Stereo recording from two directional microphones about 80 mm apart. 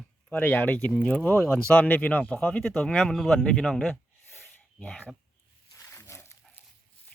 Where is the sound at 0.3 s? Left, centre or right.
Centre.